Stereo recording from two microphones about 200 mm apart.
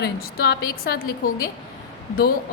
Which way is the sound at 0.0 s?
50° left (ahead or behind).